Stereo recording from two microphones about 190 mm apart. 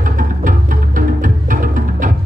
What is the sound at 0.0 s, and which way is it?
Music, 45° right (ahead or behind).